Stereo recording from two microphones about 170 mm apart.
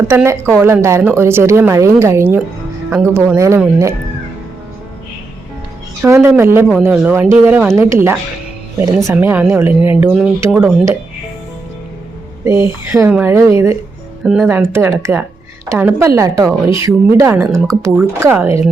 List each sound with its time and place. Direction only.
0.1 s a woman's voice: 15° right (ahead or behind)
6.0 s a woman's voice: 15° right (ahead or behind)
12.5 s a woman's voice: 15° right (ahead or behind)